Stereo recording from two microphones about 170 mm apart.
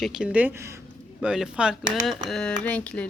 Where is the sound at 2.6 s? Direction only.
5° left (ahead or behind).